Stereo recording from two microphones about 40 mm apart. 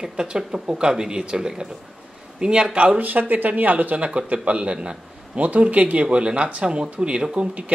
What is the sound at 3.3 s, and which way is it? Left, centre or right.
Speech, right.